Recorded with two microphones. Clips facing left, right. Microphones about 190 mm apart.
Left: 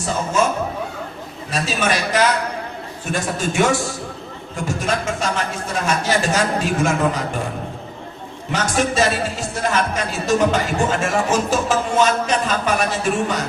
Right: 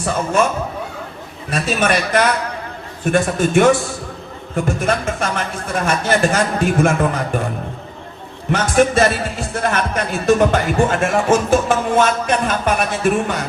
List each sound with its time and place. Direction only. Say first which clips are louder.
1.5 s speech: right 3 dB; 55° right (ahead or behind)
8.5 s speech: right 4 dB; 55° right (ahead or behind)